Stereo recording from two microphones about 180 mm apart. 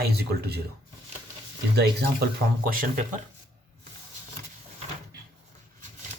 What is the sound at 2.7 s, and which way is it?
Speech, 50° right (ahead or behind).